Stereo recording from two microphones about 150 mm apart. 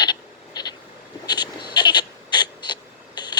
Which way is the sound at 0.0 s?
30° left (ahead or behind).